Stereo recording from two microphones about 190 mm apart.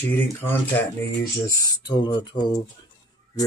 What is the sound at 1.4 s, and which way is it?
Speech, 20° left (ahead or behind).